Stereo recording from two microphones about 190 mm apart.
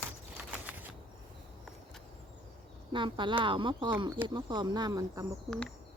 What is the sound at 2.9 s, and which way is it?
Speech, 25° right (ahead or behind).